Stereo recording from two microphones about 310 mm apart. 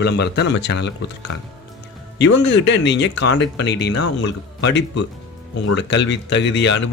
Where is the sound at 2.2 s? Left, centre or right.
Left.